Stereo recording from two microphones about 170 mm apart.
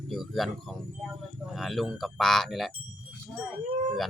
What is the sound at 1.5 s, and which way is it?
Speech, centre (ahead or behind).